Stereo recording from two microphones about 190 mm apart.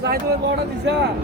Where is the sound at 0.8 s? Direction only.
65° right (ahead or behind).